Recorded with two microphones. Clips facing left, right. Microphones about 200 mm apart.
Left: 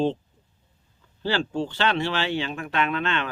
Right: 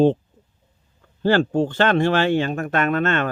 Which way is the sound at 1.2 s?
50° right (ahead or behind).